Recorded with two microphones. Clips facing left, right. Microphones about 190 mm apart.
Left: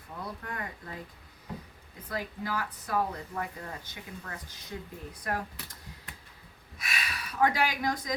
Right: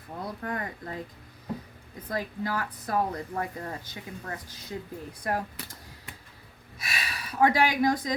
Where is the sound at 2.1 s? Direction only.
40° right (ahead or behind).